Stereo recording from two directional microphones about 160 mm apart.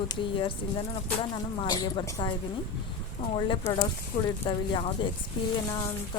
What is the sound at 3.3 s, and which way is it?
Speech, 30° left (ahead or behind).